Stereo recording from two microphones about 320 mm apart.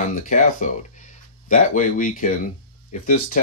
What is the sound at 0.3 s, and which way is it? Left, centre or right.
Speech, left.